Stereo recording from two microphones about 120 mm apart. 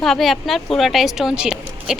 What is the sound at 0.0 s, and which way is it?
A woman's voice, centre (ahead or behind).